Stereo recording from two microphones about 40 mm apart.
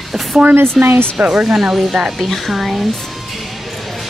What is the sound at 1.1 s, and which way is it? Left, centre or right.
Speech, right.